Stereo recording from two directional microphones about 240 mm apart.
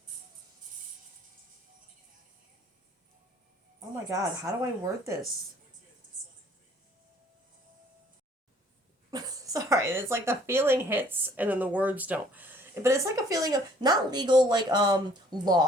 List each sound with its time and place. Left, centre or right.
3.8 s a sound: centre
4.6 s speech: centre
9.0 s speech: centre